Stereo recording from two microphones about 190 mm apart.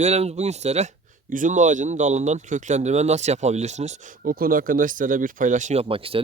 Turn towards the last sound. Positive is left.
turn(degrees=-30)  # may be behind; listen again after turning